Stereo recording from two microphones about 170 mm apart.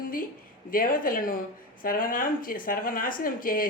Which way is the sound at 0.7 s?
55° left (ahead or behind).